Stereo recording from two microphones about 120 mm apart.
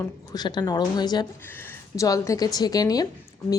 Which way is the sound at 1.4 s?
20° left (ahead or behind).